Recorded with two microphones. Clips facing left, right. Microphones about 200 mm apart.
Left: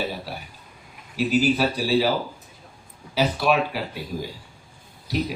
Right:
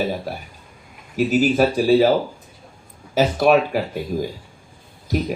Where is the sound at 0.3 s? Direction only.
45° right (ahead or behind).